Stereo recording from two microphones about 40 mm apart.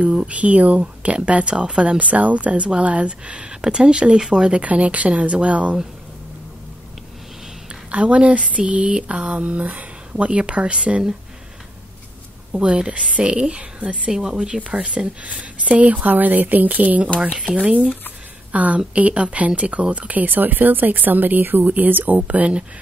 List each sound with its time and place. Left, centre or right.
0.3 s speech: right
4.6 s speech: right
7.9 s speech: right
10.1 s speech: right
12.5 s speech: right
14.1 s speech: centre
15.3 s speech: right
17.4 s speech: right
18.5 s a woman's voice: right